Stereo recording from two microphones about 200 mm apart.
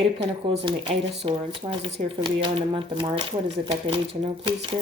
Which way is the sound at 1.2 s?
30° right (ahead or behind).